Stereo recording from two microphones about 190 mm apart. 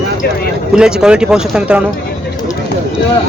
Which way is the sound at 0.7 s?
5° right (ahead or behind).